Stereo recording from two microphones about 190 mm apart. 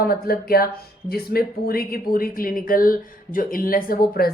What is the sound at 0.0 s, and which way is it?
A woman's voice, 50° left (ahead or behind).